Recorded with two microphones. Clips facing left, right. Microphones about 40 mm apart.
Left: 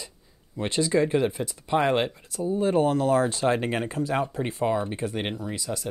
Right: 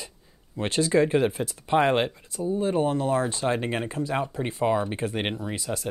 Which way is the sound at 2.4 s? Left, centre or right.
Centre.